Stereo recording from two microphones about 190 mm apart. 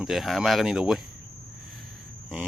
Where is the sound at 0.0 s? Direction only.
Centre (ahead or behind).